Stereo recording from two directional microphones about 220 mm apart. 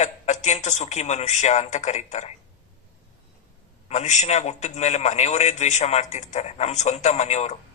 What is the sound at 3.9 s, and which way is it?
A man's voice, 30° left (ahead or behind).